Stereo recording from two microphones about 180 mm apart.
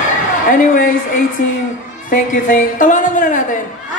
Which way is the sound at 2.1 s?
45° left (ahead or behind).